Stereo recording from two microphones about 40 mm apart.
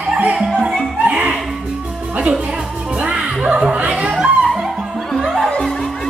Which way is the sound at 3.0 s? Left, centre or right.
Right.